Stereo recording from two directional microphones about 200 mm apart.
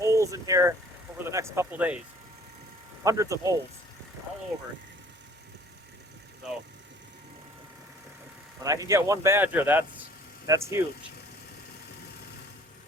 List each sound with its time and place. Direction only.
0.0 s vehicle: 15° right (ahead or behind)
1.2 s speech: 15° right (ahead or behind)
3.0 s speech: 15° right (ahead or behind)
8.6 s speech: 15° right (ahead or behind)